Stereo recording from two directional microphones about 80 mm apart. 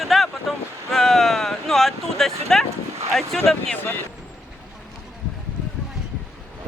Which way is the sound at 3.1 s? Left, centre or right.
Centre.